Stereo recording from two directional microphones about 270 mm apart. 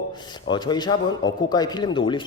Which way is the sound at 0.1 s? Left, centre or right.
Centre.